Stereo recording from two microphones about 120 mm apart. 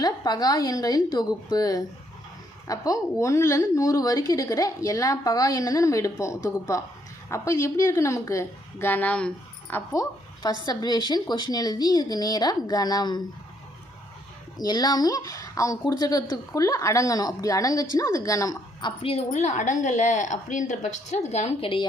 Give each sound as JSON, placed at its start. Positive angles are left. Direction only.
{"t": 0.0, "sound": "a woman's voice", "side_deg": 30}
{"t": 9.9, "sound": "a woman's voice", "side_deg": 30}
{"t": 14.6, "sound": "a woman's voice", "side_deg": 35}
{"t": 18.8, "sound": "a woman's voice", "side_deg": 45}
{"t": 19.3, "sound": "a woman's voice", "side_deg": 80}
{"t": 21.6, "sound": "a woman's voice", "side_deg": 45}